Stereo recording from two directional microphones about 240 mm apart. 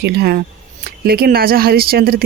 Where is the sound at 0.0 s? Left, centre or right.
Right.